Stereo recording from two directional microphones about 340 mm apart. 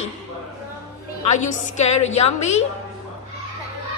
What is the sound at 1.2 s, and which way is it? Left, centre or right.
Speech, left.